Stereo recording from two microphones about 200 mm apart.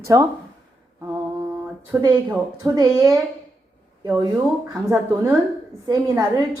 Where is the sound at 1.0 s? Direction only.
10° right (ahead or behind).